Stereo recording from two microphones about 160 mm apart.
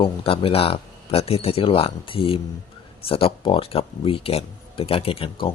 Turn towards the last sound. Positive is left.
turn(degrees=35)  # may be behind; listen again after turning